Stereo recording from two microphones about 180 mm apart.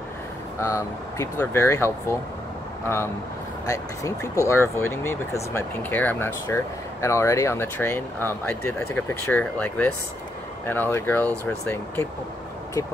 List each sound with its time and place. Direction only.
0.6 s speech: 15° left (ahead or behind)
3.6 s speech: 20° left (ahead or behind)